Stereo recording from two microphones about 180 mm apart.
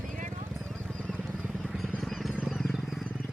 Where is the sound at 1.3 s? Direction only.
Centre (ahead or behind).